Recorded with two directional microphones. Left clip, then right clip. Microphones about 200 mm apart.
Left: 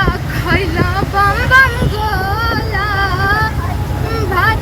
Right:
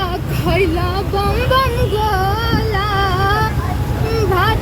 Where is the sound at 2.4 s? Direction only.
20° right (ahead or behind).